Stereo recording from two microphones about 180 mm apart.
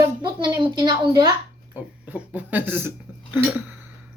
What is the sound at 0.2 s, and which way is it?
Speech, 25° right (ahead or behind).